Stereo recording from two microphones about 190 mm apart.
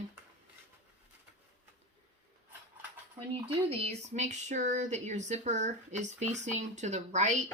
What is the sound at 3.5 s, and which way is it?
Speech, 30° right (ahead or behind).